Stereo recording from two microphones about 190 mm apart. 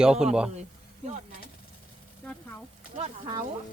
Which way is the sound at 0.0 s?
5° right (ahead or behind).